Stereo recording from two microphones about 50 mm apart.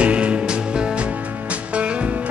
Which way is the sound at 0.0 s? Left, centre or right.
Right.